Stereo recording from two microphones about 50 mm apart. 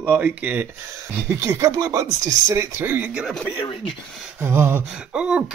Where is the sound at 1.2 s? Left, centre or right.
Right.